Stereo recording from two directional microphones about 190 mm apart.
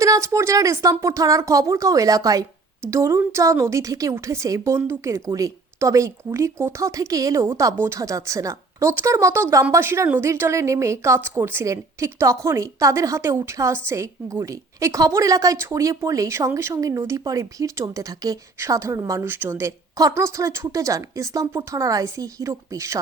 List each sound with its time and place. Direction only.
0.0 s a woman's voice: 15° right (ahead or behind)